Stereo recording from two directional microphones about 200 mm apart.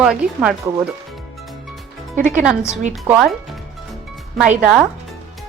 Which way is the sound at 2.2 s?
40° right (ahead or behind).